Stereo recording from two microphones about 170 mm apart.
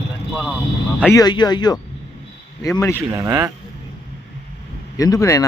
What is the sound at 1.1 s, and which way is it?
Speech, 25° left (ahead or behind).